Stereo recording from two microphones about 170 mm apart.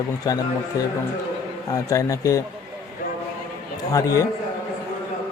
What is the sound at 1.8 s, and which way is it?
Speech, 20° left (ahead or behind).